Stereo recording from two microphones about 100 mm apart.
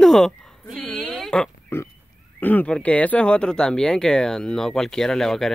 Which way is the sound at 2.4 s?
20° left (ahead or behind).